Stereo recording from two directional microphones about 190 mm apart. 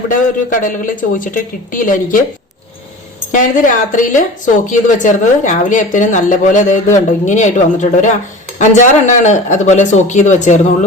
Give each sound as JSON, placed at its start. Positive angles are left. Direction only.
{"t": 0.1, "sound": "speech", "side_deg": 45}
{"t": 3.3, "sound": "speech", "side_deg": 45}